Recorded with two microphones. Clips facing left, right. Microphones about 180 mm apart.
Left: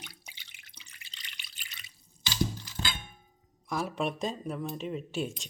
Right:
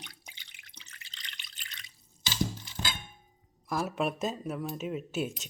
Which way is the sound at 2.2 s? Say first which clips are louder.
Left 1 dB; 20° right (ahead or behind).